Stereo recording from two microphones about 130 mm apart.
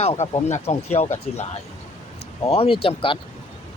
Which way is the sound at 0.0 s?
55° left (ahead or behind).